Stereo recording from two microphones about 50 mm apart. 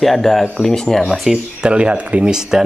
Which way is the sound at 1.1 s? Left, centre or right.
Centre.